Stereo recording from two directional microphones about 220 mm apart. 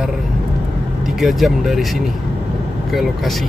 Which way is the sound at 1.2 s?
Centre (ahead or behind).